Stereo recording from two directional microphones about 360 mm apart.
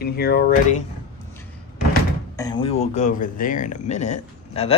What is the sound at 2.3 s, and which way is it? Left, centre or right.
Speech, centre.